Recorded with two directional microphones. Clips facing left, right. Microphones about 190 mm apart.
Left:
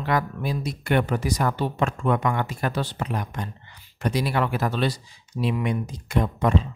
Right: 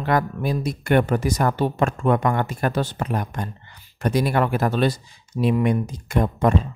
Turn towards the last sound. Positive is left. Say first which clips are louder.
# right 3 dB
turn(degrees=-50)  # may be behind; listen again after turning